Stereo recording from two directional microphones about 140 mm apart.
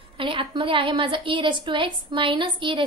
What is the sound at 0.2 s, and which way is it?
A woman's voice, 40° right (ahead or behind).